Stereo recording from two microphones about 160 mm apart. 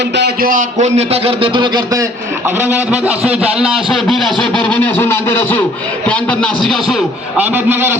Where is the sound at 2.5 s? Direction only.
10° right (ahead or behind).